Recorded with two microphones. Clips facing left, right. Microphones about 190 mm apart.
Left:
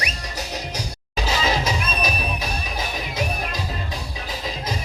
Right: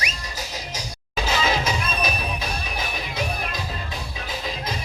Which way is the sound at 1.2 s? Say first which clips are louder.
Even; 35° left (ahead or behind).